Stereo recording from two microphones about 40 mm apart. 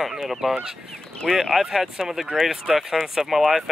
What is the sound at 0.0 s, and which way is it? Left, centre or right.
Speech, centre.